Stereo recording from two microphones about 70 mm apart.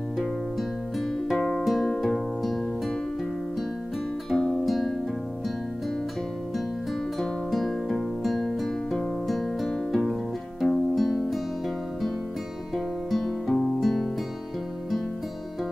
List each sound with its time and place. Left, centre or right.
0.2 s music: centre
4.3 s music: centre
7.2 s music: centre
12.7 s music: centre